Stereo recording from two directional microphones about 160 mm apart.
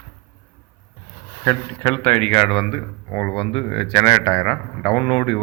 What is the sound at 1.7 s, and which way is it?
Speech, 35° left (ahead or behind).